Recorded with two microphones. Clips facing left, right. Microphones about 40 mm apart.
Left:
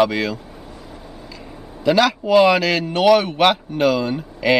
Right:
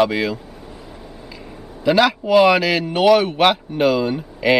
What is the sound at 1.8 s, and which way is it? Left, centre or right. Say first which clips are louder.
A man's voice: right 1 dB; centre.